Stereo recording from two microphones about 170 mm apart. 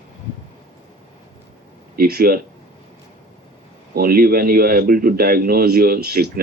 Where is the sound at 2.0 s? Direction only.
65° right (ahead or behind).